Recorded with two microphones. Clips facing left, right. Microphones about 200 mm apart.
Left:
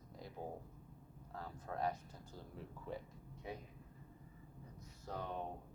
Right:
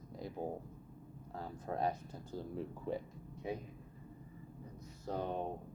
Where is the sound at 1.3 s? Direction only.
25° right (ahead or behind).